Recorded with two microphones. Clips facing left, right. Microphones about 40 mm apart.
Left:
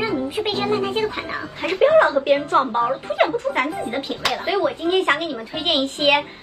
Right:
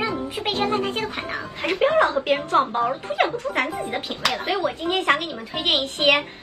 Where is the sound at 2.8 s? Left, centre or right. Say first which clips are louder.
Left 2 dB; centre.